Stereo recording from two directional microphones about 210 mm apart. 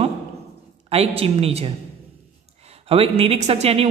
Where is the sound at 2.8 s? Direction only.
25° right (ahead or behind).